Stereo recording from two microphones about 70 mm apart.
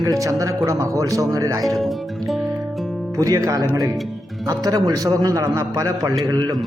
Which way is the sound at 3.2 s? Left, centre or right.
Right.